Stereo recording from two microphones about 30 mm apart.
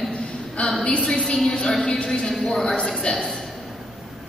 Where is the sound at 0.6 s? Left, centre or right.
Left.